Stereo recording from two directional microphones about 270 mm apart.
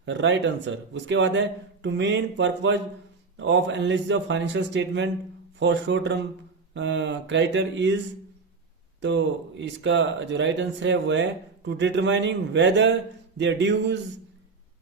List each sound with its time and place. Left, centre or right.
0.0 s a man's voice: right
9.0 s a man's voice: right